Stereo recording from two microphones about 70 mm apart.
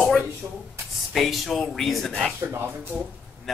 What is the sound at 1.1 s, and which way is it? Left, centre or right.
Speech, centre.